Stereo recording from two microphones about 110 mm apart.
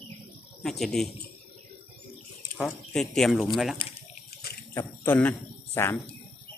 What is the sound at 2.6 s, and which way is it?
Speech, 5° left (ahead or behind).